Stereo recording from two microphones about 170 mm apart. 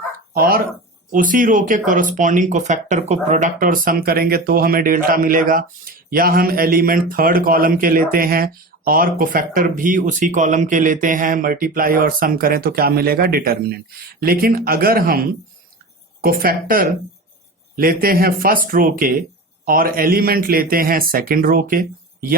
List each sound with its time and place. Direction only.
0.3 s speech: 60° right (ahead or behind)